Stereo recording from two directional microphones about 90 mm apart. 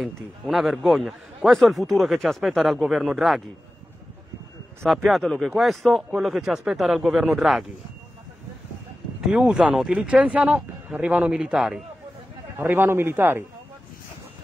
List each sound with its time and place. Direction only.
0.0 s a man's voice: centre (ahead or behind)
4.8 s a man's voice: centre (ahead or behind)
9.2 s speech: 10° right (ahead or behind)
12.5 s a man's voice: 25° right (ahead or behind)